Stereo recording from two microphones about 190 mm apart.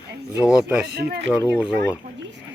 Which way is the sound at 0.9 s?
55° right (ahead or behind).